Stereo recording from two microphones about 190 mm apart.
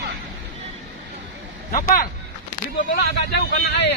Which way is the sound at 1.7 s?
50° left (ahead or behind).